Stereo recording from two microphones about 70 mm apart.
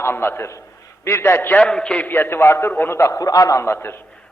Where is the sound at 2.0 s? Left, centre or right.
Left.